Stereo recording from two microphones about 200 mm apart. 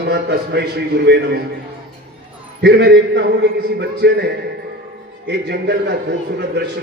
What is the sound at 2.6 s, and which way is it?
A man's voice, 60° right (ahead or behind).